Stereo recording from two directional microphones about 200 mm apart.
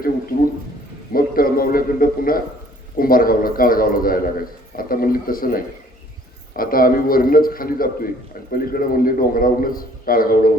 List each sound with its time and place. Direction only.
1.1 s a man's voice: 45° left (ahead or behind)